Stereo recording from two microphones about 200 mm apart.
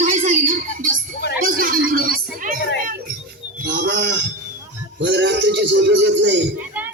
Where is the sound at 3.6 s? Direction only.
45° right (ahead or behind).